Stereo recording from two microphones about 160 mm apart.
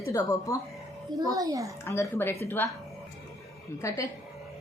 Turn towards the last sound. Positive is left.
turn(degrees=20)  # may be behind; listen again after turning